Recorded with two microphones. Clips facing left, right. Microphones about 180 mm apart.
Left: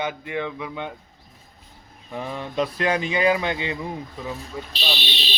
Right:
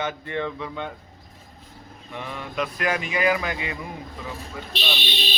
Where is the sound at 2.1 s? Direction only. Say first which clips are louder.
Left 4 dB; 35° left (ahead or behind).